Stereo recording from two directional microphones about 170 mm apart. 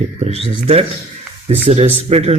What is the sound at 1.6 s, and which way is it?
Speech, 40° right (ahead or behind).